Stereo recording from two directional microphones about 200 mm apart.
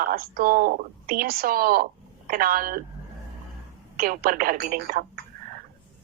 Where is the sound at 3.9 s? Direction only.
45° right (ahead or behind).